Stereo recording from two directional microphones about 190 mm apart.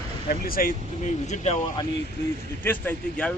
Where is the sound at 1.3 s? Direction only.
35° left (ahead or behind).